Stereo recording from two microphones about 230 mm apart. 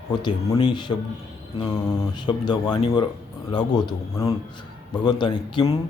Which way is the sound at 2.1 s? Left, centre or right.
Centre.